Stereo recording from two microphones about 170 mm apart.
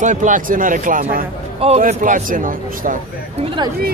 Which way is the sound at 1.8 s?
50° right (ahead or behind).